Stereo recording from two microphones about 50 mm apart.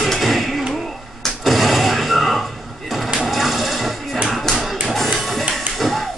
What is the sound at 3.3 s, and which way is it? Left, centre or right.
Music, centre.